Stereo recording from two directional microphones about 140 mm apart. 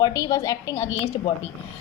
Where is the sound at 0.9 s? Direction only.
45° left (ahead or behind).